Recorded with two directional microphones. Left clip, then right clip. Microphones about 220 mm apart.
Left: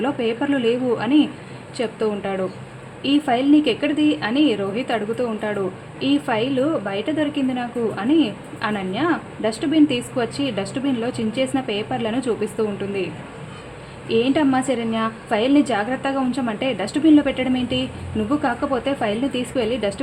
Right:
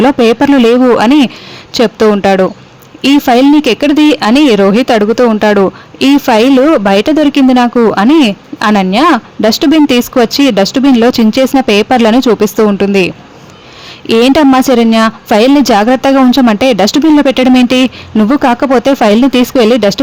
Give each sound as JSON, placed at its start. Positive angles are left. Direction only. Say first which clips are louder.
{"t": 0.0, "sound": "speech", "louder": "right 15 dB", "side_deg": -50}
{"t": 14.1, "sound": "speech", "louder": "right 13 dB", "side_deg": -50}